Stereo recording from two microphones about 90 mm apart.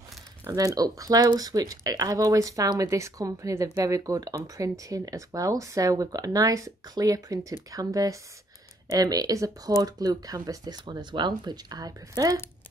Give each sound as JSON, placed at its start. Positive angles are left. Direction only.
{"t": 0.7, "sound": "speech", "side_deg": -40}